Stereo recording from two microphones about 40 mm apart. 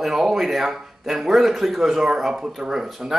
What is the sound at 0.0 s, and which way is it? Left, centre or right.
Speech, centre.